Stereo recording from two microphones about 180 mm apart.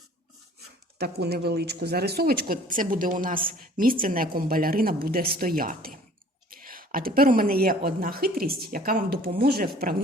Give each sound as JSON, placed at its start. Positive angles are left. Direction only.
{"t": 0.9, "sound": "a woman's voice", "side_deg": -65}